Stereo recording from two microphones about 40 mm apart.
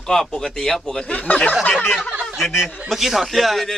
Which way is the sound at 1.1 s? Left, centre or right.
Left.